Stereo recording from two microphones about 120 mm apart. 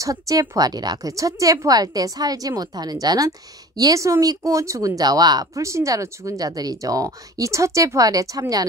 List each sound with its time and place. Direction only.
0.0 s a woman's voice: 30° right (ahead or behind)